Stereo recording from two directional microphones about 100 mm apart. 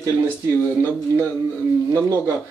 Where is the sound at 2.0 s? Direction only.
30° right (ahead or behind).